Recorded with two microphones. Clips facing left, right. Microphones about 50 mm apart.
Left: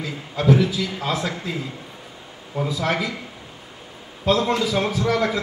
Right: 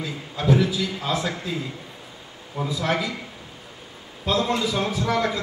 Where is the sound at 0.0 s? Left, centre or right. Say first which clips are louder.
Left 4 dB; left.